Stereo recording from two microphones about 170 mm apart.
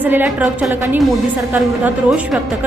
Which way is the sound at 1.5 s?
10° right (ahead or behind).